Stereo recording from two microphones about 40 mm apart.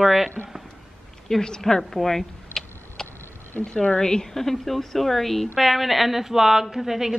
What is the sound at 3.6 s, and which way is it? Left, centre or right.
Speech, left.